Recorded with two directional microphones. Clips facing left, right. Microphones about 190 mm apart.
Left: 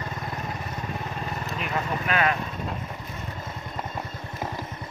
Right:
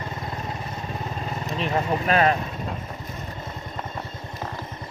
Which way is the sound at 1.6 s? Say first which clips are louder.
Right 6 dB; 30° right (ahead or behind).